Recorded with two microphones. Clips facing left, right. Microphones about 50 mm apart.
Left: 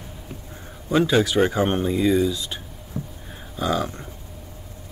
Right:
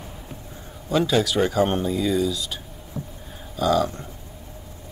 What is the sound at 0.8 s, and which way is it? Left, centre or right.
Speech, left.